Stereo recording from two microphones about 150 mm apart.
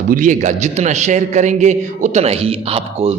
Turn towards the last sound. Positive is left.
turn(degrees=-40)  # may be behind; listen again after turning